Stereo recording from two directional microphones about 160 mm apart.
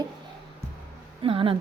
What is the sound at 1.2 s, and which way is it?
Speech, 35° right (ahead or behind).